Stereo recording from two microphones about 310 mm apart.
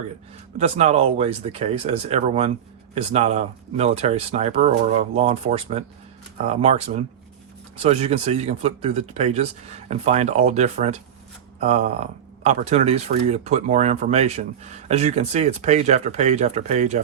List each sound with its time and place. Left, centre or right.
0.6 s speech: right